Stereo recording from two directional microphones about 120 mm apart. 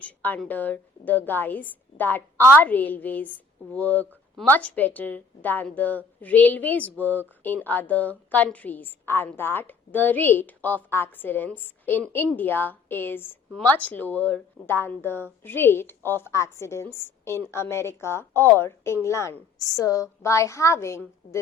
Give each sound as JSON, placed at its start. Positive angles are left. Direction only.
{"t": 0.0, "sound": "a woman's voice", "side_deg": 10}